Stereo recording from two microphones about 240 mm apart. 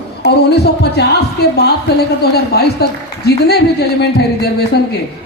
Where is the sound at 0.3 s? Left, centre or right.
Left.